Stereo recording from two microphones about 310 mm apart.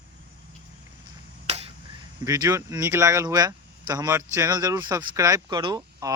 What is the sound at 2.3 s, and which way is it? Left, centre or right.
Speech, centre.